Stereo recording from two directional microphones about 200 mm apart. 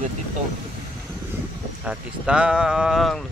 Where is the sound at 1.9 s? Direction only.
5° right (ahead or behind).